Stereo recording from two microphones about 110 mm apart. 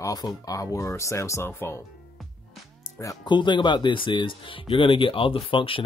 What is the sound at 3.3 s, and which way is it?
Speech, 45° left (ahead or behind).